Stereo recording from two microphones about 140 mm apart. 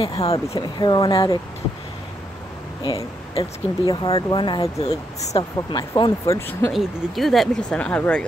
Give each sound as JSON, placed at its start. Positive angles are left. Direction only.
{"t": 0.0, "sound": "speech", "side_deg": 45}
{"t": 0.6, "sound": "speech", "side_deg": 30}
{"t": 2.8, "sound": "speech", "side_deg": 25}
{"t": 6.3, "sound": "speech", "side_deg": 20}
{"t": 6.7, "sound": "speech", "side_deg": 0}